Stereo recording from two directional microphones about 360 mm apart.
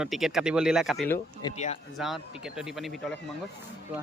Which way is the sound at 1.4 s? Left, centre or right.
Centre.